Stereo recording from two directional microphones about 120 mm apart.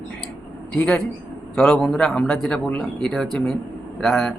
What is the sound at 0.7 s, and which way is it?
A man's voice, 10° left (ahead or behind).